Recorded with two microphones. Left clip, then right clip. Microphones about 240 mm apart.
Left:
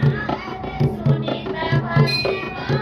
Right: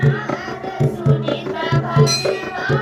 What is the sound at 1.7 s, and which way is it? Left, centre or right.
Music, centre.